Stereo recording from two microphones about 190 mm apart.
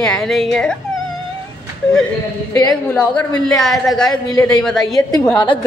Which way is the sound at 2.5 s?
20° left (ahead or behind).